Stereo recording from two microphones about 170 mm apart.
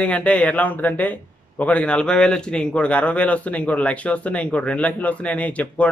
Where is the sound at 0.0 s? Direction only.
5° left (ahead or behind).